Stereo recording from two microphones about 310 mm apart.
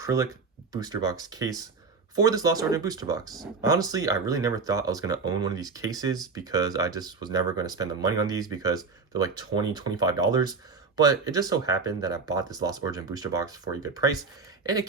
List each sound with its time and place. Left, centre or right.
0.0 s speech: centre